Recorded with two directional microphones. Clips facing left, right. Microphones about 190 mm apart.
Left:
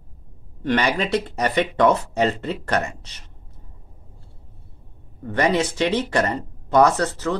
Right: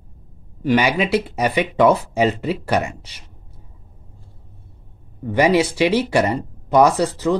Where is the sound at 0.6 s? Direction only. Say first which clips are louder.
Right 4 dB; 5° right (ahead or behind).